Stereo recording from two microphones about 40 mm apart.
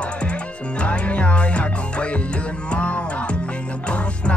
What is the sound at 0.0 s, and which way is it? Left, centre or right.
Music, left.